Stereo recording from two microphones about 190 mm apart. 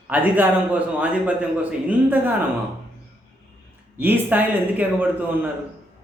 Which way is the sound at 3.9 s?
10° right (ahead or behind).